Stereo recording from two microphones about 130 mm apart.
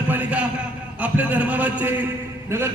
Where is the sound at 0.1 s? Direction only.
10° right (ahead or behind).